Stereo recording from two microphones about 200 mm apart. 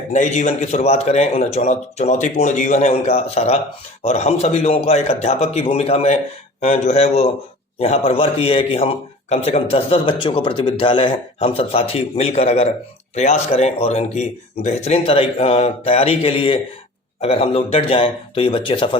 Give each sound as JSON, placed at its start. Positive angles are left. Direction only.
{"t": 0.1, "sound": "a man's voice", "side_deg": 35}